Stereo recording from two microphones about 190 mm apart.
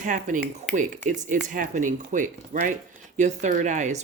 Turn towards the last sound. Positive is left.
turn(degrees=-40)  # may be behind; listen again after turning